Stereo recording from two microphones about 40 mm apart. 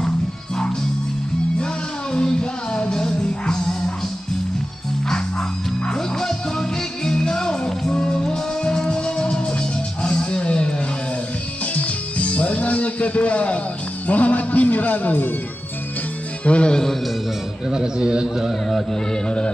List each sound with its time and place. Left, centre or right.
2.1 s music: left
5.9 s music: centre; by 15.3 s left
16.4 s speech: left
17.6 s a man's voice: centre
19.2 s speech: left